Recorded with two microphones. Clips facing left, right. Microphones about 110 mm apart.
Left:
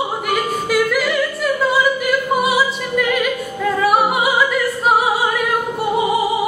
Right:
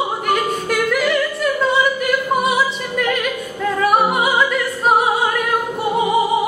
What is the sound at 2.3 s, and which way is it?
Opera, 5° left (ahead or behind).